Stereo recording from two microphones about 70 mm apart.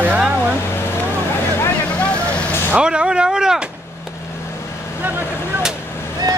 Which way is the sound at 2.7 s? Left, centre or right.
Centre.